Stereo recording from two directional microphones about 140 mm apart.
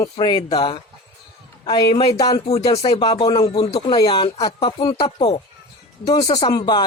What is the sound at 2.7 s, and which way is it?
Speech, 40° left (ahead or behind).